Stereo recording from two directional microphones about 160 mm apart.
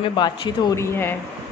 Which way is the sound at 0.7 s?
15° left (ahead or behind).